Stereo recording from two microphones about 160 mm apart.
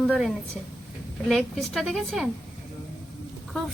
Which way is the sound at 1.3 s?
Centre (ahead or behind).